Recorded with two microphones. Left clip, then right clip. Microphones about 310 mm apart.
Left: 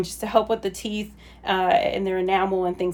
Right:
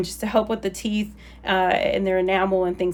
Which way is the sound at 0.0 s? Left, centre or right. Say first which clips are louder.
Left 1 dB; centre.